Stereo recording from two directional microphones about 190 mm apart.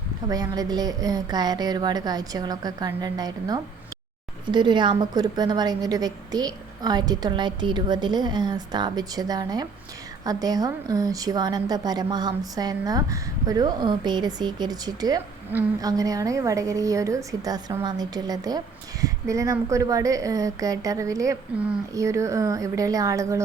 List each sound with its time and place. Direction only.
0.3 s a woman's voice: 20° right (ahead or behind)